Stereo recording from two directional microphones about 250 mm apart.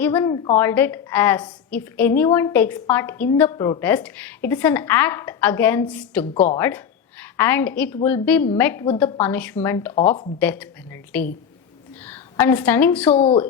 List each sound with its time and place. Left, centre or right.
0.0 s a woman's voice: centre
13.1 s speech: left